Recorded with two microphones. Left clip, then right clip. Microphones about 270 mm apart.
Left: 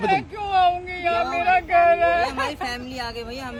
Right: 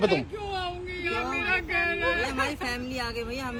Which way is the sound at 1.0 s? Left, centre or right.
Centre.